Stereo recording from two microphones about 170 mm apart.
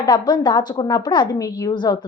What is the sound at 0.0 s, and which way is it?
A woman's voice, 25° left (ahead or behind).